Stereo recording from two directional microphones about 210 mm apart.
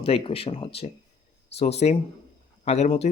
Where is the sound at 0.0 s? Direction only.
25° left (ahead or behind).